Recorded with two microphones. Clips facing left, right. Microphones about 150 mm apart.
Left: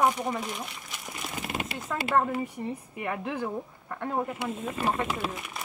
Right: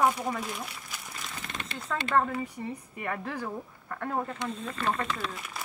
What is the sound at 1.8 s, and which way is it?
Speech, 15° left (ahead or behind).